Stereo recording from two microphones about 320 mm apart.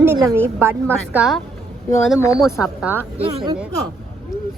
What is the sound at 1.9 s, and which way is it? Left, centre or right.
Speech, centre.